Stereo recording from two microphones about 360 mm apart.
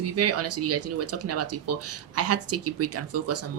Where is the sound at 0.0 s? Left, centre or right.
Right.